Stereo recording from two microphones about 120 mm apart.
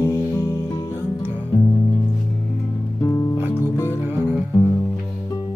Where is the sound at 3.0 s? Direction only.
20° left (ahead or behind).